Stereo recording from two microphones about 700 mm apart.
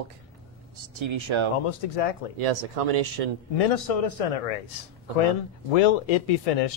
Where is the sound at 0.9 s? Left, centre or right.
Right.